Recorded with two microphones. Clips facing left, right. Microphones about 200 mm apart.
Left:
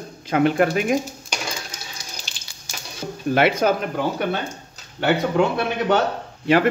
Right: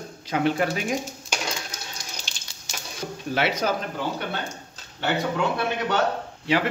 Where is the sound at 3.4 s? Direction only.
55° left (ahead or behind).